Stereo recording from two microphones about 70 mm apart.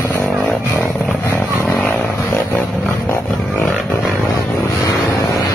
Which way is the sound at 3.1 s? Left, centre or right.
Left.